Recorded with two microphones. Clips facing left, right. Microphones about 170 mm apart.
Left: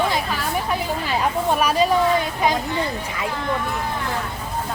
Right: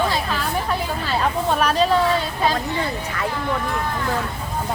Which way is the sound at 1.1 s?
10° left (ahead or behind).